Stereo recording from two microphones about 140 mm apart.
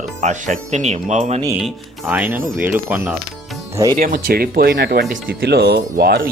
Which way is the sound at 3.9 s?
80° right.